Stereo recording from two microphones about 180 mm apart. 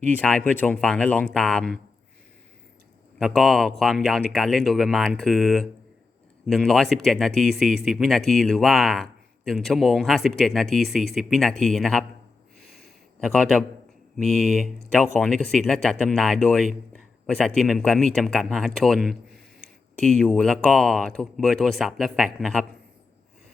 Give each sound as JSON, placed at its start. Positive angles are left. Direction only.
{"t": 0.0, "sound": "speech", "side_deg": 10}
{"t": 3.2, "sound": "a man's voice", "side_deg": 0}
{"t": 13.1, "sound": "a man's voice", "side_deg": 0}